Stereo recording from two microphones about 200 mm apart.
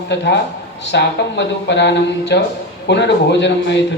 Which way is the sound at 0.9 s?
60° left (ahead or behind).